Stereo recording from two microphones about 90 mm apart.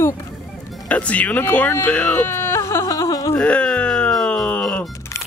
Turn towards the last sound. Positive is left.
turn(degrees=10)  # may be behind; listen again after turning